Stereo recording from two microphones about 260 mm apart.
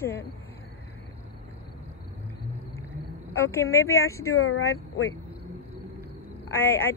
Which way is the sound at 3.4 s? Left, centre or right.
Centre.